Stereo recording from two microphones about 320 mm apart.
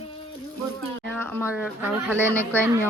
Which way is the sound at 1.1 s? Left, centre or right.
Centre.